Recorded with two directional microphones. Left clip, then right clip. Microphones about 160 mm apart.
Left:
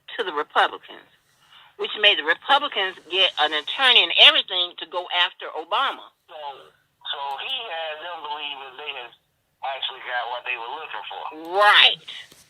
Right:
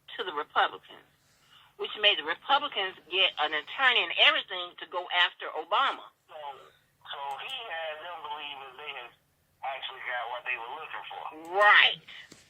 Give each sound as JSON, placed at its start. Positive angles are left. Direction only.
{"t": 0.1, "sound": "speech", "side_deg": 35}